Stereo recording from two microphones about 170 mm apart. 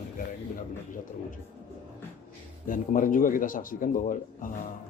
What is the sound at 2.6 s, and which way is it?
Speech, 50° left (ahead or behind).